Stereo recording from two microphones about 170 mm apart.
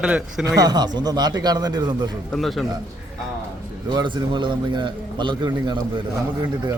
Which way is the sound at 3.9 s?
30° right (ahead or behind).